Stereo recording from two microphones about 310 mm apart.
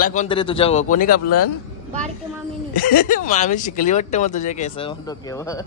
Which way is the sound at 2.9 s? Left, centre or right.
Left.